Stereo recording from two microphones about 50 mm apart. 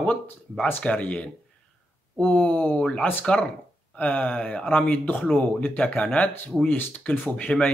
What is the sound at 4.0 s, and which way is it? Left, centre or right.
Speech, left.